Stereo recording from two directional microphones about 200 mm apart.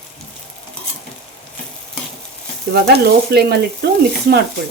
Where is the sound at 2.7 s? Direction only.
55° right (ahead or behind).